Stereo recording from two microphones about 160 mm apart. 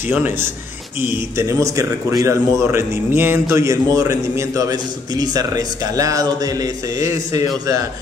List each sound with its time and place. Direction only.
0.1 s a man's voice: 10° right (ahead or behind)